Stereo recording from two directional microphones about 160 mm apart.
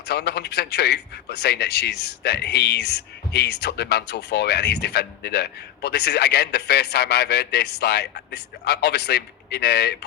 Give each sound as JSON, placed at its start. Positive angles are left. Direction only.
{"t": 0.1, "sound": "a man's voice", "side_deg": 90}